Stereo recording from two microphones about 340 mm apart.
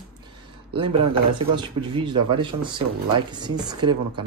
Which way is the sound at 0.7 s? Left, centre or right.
Centre.